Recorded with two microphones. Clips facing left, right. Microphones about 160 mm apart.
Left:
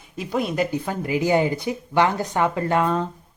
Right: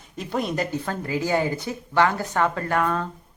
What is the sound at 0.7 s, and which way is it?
Speech, 15° left (ahead or behind).